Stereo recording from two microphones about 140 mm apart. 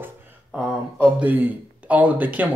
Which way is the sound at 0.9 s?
10° right (ahead or behind).